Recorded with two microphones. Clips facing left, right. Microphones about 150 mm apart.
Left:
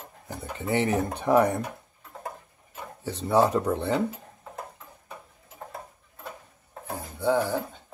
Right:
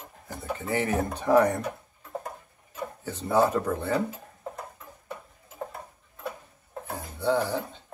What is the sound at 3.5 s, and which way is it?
Speech, 15° left (ahead or behind).